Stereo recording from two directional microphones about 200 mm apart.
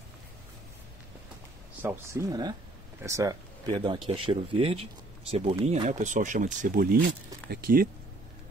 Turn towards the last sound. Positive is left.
turn(degrees=-45)  # may be behind; listen again after turning